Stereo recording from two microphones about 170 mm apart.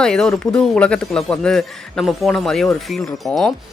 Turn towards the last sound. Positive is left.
turn(degrees=0)  # may be behind; listen again after turning